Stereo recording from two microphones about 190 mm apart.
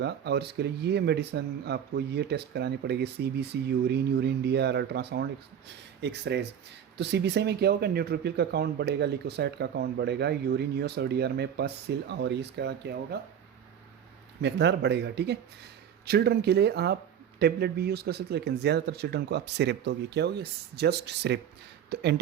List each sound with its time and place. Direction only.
0.0 s speech: 60° right (ahead or behind)
14.4 s speech: 65° right (ahead or behind)